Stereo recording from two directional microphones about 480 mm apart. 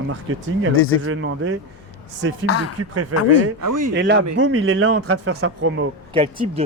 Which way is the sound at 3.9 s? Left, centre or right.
Right.